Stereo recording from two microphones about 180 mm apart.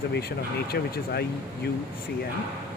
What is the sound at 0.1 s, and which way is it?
Speech, 60° left (ahead or behind).